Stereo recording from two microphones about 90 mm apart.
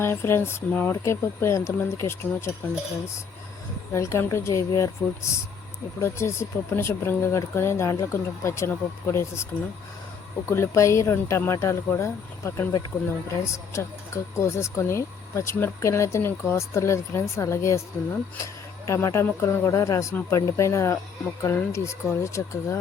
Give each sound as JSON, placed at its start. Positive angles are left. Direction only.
{"t": 0.0, "sound": "speech", "side_deg": 25}
{"t": 3.9, "sound": "speech", "side_deg": 30}
{"t": 6.0, "sound": "speech", "side_deg": 30}
{"t": 10.5, "sound": "speech", "side_deg": 30}